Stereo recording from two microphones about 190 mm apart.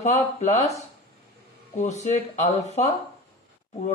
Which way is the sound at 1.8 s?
35° left (ahead or behind).